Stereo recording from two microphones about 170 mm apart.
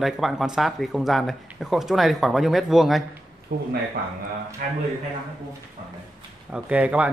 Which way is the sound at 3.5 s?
65° right (ahead or behind).